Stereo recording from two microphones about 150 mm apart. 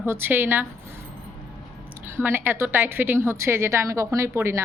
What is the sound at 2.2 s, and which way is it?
Speech, 15° right (ahead or behind).